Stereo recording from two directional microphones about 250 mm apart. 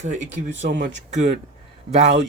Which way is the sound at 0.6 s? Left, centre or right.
Right.